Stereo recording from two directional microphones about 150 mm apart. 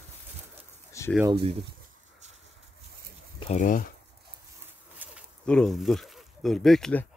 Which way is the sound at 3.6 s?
60° left (ahead or behind).